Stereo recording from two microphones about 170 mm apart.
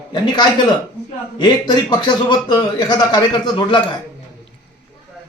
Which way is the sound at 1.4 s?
25° left (ahead or behind).